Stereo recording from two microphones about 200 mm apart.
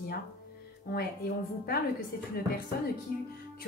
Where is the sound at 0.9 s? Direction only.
50° left (ahead or behind).